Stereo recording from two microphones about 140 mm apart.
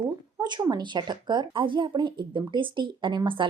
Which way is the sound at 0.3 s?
30° right (ahead or behind).